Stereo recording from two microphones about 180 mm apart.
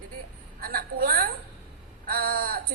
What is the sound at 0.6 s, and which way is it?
A woman's voice, 55° right (ahead or behind).